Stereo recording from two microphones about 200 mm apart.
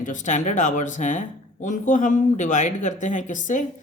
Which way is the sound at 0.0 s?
40° left (ahead or behind).